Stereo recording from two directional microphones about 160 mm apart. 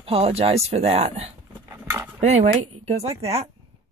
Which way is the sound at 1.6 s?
15° right (ahead or behind).